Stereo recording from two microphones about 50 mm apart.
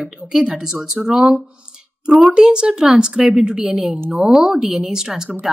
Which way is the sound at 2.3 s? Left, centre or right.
Centre.